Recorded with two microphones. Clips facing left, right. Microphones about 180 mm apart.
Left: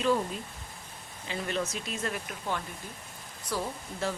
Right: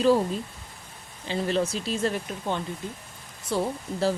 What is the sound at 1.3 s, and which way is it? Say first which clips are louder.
Speech: right 7 dB; 30° right (ahead or behind).